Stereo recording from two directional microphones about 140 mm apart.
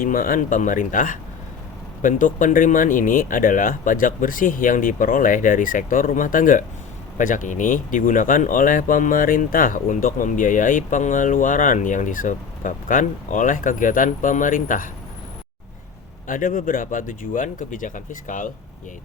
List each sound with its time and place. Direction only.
0.0 s speech: 85° left
16.2 s speech: 70° left (ahead or behind)